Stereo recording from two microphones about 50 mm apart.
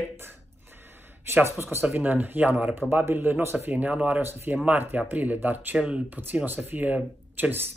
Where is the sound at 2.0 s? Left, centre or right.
Right.